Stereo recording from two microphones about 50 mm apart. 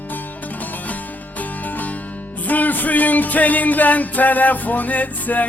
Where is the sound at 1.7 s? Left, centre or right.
Left.